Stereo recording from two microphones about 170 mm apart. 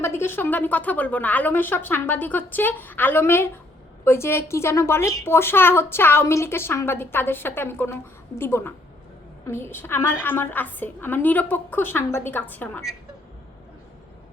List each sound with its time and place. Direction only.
0.0 s a woman's voice: 15° left (ahead or behind)